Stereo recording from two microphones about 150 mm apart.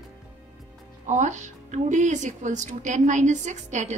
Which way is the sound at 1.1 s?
55° right (ahead or behind).